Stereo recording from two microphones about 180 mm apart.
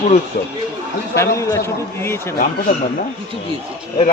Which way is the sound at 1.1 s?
15° left (ahead or behind).